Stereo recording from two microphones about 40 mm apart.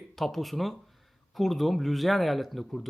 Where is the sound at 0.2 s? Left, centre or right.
Centre.